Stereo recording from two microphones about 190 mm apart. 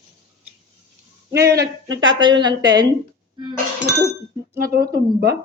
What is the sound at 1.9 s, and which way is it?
Speech, 25° right (ahead or behind).